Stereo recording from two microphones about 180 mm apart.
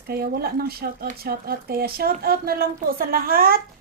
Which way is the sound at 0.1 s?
60° right (ahead or behind).